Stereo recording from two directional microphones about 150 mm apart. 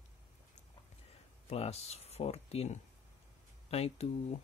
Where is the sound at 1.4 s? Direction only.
45° left (ahead or behind).